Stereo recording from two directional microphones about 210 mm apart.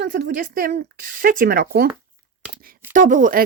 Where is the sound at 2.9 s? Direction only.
40° right (ahead or behind).